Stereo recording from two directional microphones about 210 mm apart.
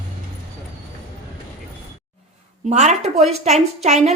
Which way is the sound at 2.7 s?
30° right (ahead or behind).